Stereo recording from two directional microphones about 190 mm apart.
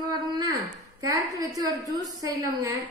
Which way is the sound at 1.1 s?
20° right (ahead or behind).